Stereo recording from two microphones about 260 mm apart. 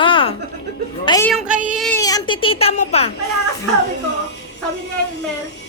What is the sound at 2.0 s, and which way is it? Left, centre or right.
A child's voice, centre.